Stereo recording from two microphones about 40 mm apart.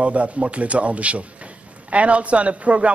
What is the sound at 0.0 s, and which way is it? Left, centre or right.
A man's voice, right.